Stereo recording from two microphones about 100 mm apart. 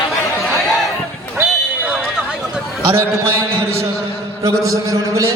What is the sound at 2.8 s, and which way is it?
Speech, 25° right (ahead or behind).